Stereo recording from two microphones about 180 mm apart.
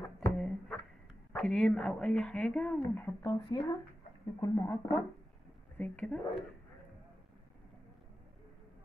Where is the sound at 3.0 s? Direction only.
20° left (ahead or behind).